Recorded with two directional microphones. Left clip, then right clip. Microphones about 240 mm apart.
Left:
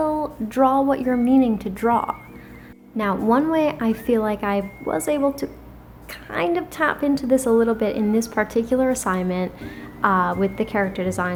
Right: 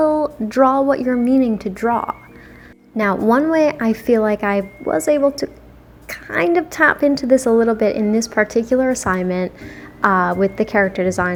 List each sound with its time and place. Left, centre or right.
0.0 s a woman's voice: right
3.2 s a woman's voice: centre